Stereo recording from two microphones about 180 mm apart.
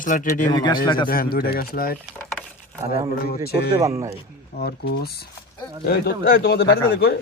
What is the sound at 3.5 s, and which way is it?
A man's voice, 60° left (ahead or behind).